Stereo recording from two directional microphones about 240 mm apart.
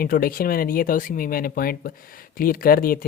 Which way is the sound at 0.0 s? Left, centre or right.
Left.